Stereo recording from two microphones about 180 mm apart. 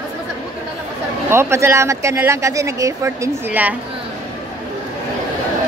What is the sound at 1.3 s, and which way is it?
Speech, 15° right (ahead or behind).